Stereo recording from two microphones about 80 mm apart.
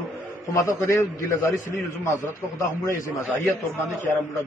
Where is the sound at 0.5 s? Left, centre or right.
Left.